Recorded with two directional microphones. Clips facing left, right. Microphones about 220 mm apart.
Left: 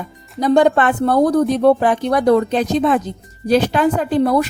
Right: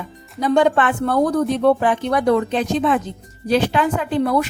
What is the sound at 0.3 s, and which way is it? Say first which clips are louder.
A woman's voice: left 3 dB; 40° left (ahead or behind).